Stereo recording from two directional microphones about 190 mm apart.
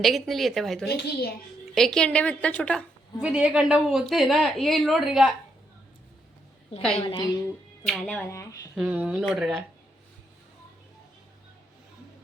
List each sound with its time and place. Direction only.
0.0 s a woman's voice: centre (ahead or behind)
3.2 s speech: 5° right (ahead or behind)
7.1 s speech: 20° left (ahead or behind)
7.9 s a woman's voice: 5° left (ahead or behind)
8.7 s speech: 5° right (ahead or behind)